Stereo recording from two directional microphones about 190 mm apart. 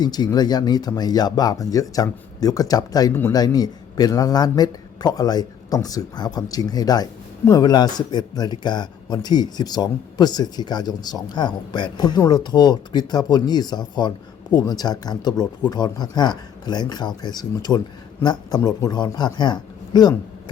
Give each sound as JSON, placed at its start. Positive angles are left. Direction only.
{"t": 0.0, "sound": "speech", "side_deg": 20}